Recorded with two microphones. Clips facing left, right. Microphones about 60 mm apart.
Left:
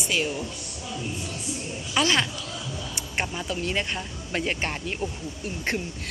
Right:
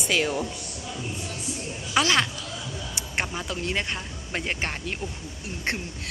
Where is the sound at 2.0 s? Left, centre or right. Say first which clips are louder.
Right 1 dB; right.